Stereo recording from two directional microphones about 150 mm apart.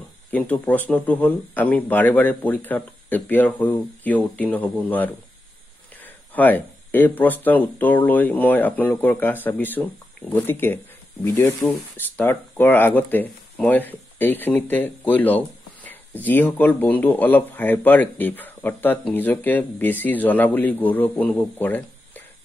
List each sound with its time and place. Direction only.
0.3 s speech: 10° left (ahead or behind)